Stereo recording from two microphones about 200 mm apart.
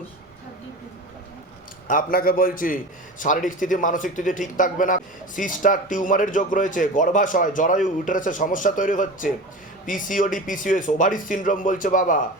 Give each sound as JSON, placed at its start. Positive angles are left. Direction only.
{"t": 1.9, "sound": "speech", "side_deg": 45}